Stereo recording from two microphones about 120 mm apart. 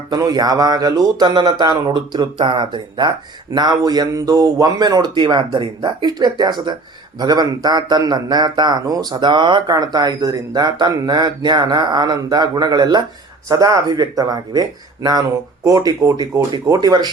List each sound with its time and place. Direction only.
0.1 s a man's voice: 35° right (ahead or behind)